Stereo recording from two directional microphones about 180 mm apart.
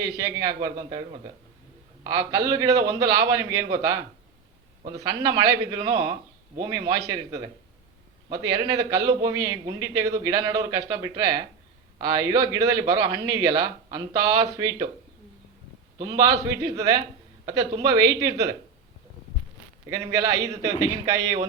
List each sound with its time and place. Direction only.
0.0 s a man's voice: 20° right (ahead or behind)
16.0 s a man's voice: 20° right (ahead or behind)
18.3 s a man's voice: 20° right (ahead or behind)
19.9 s a man's voice: 15° right (ahead or behind)